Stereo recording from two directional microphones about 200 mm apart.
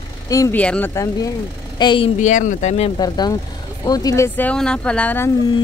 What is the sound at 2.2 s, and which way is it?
Speech, 35° left (ahead or behind).